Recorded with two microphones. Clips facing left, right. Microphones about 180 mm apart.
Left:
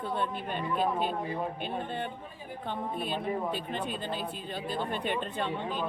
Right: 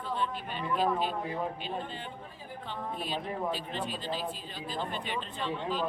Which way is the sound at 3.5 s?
55° left (ahead or behind).